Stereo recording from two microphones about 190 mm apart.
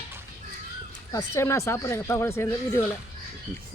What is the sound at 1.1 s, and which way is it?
Speech, 15° left (ahead or behind).